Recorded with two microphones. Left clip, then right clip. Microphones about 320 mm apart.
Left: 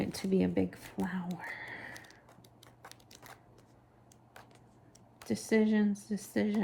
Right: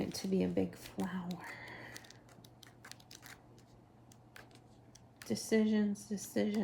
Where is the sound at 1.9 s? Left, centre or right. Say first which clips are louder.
Left 3 dB; centre.